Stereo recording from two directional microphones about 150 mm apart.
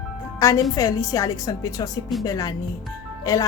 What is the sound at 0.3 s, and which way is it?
Speech, 20° left (ahead or behind).